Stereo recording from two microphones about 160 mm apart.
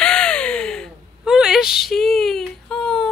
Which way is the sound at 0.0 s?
5° left (ahead or behind).